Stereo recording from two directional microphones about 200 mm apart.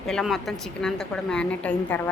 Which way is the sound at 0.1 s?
Centre (ahead or behind).